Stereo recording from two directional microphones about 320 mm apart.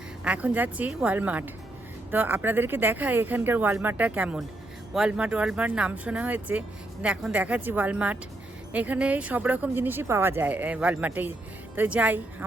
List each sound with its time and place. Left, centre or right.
0.3 s speech: centre